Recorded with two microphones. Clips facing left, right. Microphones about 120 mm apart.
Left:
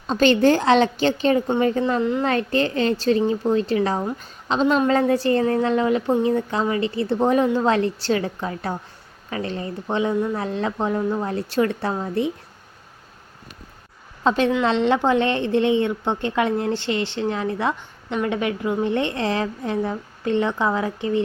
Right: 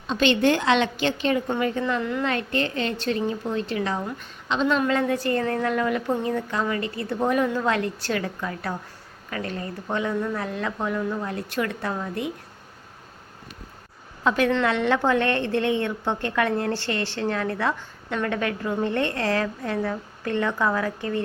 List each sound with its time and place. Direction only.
0.1 s a woman's voice: 40° left (ahead or behind)
14.3 s a woman's voice: 25° left (ahead or behind)